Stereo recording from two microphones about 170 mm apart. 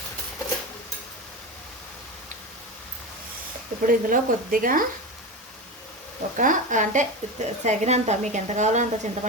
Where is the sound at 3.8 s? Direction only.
55° right (ahead or behind).